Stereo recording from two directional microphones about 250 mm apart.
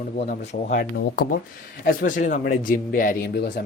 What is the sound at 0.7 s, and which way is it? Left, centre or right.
Speech, left.